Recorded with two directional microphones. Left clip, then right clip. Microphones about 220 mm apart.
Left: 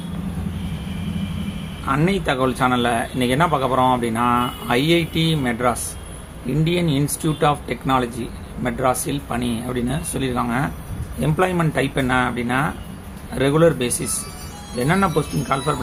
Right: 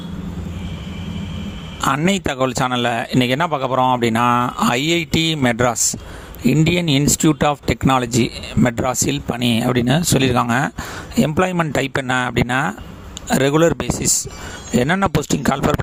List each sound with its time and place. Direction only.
1.9 s speech: 50° right (ahead or behind)